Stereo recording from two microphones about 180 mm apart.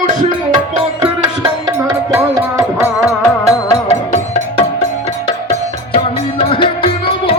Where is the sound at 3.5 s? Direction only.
20° left (ahead or behind).